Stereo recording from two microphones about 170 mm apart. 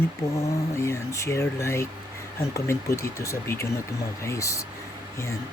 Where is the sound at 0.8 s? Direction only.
15° left (ahead or behind).